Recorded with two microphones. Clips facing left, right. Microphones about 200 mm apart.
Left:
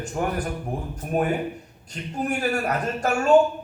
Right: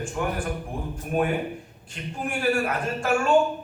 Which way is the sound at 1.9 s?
40° left (ahead or behind).